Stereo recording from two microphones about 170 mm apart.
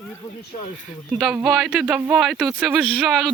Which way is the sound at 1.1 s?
5° right (ahead or behind).